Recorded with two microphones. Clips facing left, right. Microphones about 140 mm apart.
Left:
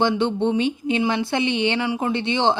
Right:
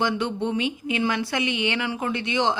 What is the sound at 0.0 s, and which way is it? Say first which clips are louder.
A woman's voice: left 5 dB; 30° left (ahead or behind).